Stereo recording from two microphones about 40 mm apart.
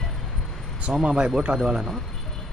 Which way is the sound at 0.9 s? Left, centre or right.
Centre.